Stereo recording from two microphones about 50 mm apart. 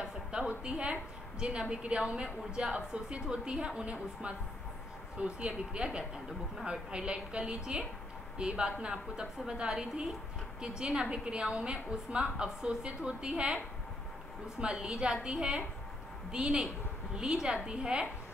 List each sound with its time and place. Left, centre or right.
0.5 s a woman's voice: right
14.6 s a woman's voice: centre